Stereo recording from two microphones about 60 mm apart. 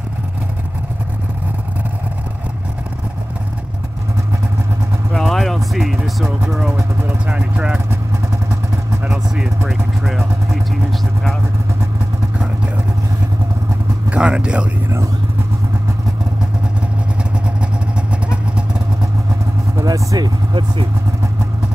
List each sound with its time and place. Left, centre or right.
5.1 s a sound: centre
7.2 s vehicle: centre
9.7 s vehicle: centre
14.1 s a sound: centre
17.6 s vehicle: centre
19.8 s vehicle: right